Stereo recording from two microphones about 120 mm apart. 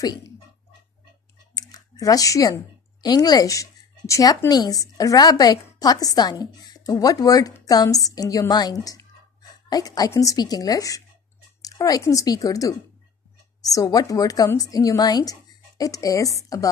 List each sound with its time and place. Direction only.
1.5 s a woman's voice: 35° left (ahead or behind)